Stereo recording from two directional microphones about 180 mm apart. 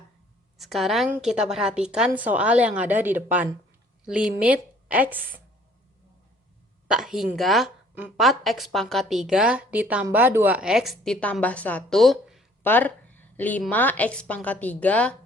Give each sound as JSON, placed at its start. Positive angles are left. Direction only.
{"t": 0.6, "sound": "a woman's voice", "side_deg": 0}
{"t": 6.8, "sound": "a woman's voice", "side_deg": -5}
{"t": 12.6, "sound": "a sound", "side_deg": 10}
{"t": 13.6, "sound": "a woman's voice", "side_deg": 10}